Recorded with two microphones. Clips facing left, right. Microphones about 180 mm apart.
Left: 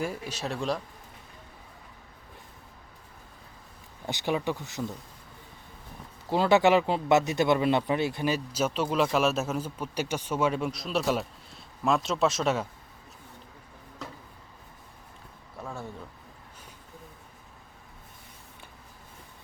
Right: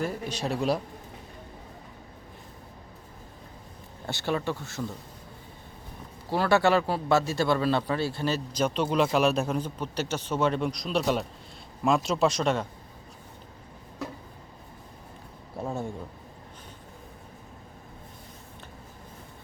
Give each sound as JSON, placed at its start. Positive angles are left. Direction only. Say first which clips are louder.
{"t": 0.0, "sound": "speech", "louder": "right 2 dB", "side_deg": 10}
{"t": 4.0, "sound": "speech", "louder": "even", "side_deg": 15}
{"t": 6.3, "sound": "speech", "louder": "left 1 dB", "side_deg": 20}
{"t": 15.5, "sound": "speech", "louder": "right 6 dB", "side_deg": -25}